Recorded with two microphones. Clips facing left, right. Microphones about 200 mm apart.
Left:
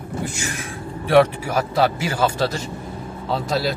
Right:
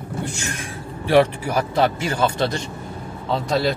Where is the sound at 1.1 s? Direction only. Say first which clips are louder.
Left 1 dB; centre (ahead or behind).